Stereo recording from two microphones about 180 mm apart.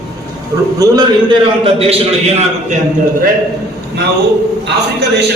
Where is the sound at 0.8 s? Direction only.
25° right (ahead or behind).